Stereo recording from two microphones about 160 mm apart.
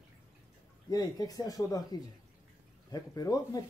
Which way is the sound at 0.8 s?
25° left (ahead or behind).